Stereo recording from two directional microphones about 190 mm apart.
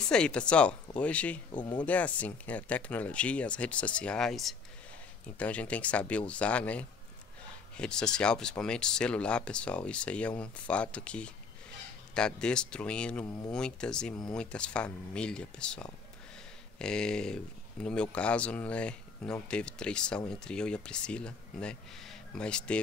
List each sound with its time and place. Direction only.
0.1 s speech: 5° left (ahead or behind)
1.5 s speech: 25° left (ahead or behind)
1.9 s speech: 5° left (ahead or behind)